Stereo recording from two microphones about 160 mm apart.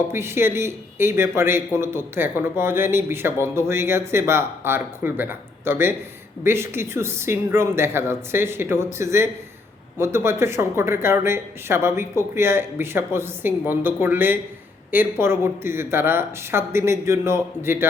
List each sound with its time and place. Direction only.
0.1 s speech: 15° right (ahead or behind)